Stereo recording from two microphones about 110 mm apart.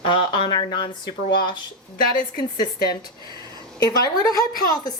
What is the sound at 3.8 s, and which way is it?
A woman's voice, 35° left (ahead or behind).